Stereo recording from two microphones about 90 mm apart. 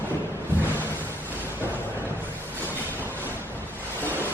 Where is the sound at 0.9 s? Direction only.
20° left (ahead or behind).